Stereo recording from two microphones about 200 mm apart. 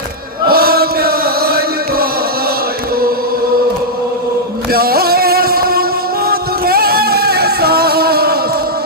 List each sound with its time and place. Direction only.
0.4 s chant: 50° right (ahead or behind)
4.7 s music: 50° right (ahead or behind)